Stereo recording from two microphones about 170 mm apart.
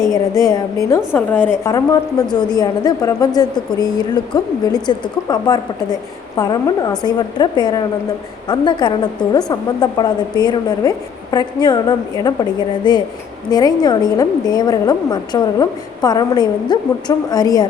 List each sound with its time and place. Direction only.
0.1 s a woman's voice: 20° left (ahead or behind)